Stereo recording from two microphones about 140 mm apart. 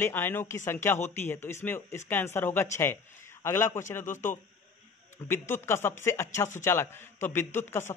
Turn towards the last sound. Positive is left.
turn(degrees=20)  # may be behind; listen again after turning